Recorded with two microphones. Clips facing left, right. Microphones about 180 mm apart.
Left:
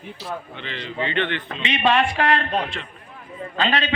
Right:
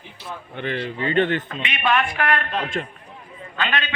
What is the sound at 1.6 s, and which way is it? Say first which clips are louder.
A man's voice: left 5 dB; 30° left (ahead or behind).